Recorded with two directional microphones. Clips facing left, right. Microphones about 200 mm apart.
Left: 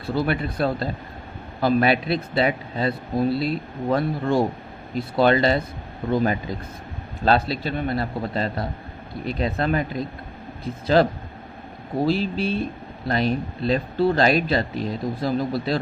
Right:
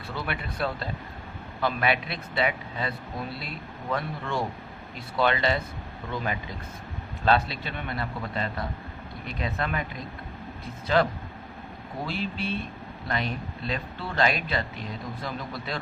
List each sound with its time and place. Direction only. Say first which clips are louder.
0.1 s speech: left 11 dB; 35° left (ahead or behind)